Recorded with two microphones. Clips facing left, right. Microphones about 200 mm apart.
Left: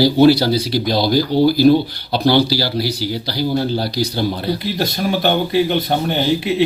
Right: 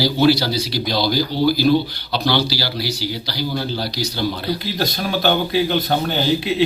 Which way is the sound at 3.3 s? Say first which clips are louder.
Left 7 dB; 50° left (ahead or behind).